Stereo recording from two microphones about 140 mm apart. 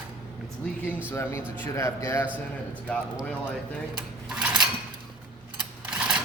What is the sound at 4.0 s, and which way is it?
Dishes, 5° right (ahead or behind).